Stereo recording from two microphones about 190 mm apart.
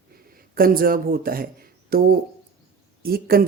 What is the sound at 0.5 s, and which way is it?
Speech, 50° right (ahead or behind).